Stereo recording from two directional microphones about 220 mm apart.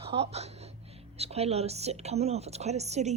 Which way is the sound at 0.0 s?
25° right (ahead or behind).